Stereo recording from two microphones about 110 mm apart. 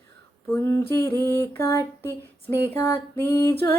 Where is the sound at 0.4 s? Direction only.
20° left (ahead or behind).